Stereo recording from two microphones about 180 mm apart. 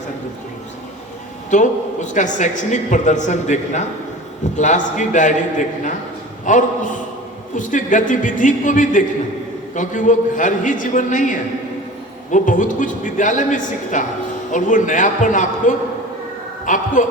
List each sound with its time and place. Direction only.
1.5 s a man's voice: 45° left (ahead or behind)